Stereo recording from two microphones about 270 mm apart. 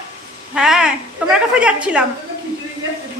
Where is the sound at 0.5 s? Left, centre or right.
Centre.